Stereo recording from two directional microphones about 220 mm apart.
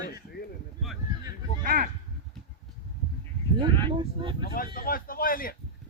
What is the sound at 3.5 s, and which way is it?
Speech, 20° right (ahead or behind).